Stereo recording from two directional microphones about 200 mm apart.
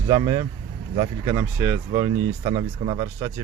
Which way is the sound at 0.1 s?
15° right (ahead or behind).